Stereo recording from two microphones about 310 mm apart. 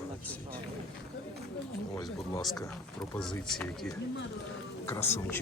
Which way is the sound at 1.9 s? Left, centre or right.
Centre.